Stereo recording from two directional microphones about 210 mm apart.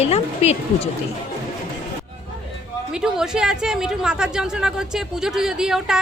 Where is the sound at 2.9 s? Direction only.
5° right (ahead or behind).